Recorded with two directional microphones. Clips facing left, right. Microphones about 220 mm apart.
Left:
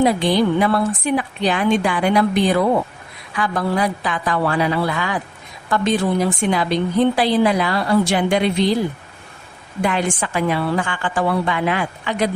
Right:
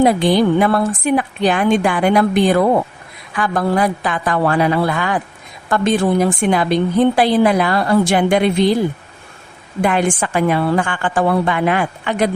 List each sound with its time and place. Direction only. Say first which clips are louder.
0.0 s a woman's voice: right 3 dB; 50° right (ahead or behind)
9.8 s a woman's voice: right 4 dB; 50° right (ahead or behind)